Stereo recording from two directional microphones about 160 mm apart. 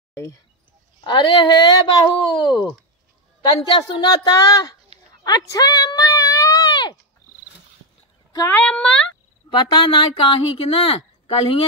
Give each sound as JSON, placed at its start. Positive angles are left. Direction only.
{"t": 0.1, "sound": "speech", "side_deg": 15}
{"t": 1.0, "sound": "speech", "side_deg": 30}
{"t": 3.6, "sound": "speech", "side_deg": 30}
{"t": 5.2, "sound": "a sound", "side_deg": 25}
{"t": 8.3, "sound": "speech", "side_deg": 20}
{"t": 8.5, "sound": "speech", "side_deg": 10}
{"t": 9.5, "sound": "speech", "side_deg": 30}